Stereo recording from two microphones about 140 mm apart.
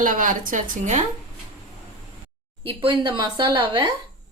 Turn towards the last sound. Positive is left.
turn(degrees=-35)  # may be behind; listen again after turning